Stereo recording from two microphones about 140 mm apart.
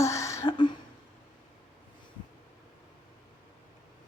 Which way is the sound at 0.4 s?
35° left (ahead or behind).